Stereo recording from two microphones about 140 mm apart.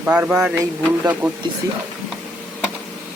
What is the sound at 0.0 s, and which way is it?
Speech, 10° right (ahead or behind).